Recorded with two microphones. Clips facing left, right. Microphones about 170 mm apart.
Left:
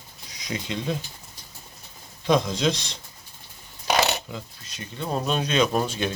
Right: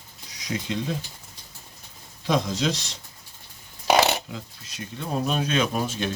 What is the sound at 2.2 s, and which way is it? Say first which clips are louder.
Speech: left 2 dB; centre (ahead or behind).